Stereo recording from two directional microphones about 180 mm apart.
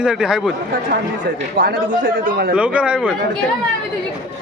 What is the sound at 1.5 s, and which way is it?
A man's voice, 50° right (ahead or behind).